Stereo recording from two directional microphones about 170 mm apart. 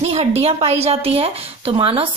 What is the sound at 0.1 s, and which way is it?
Speech, 40° right (ahead or behind).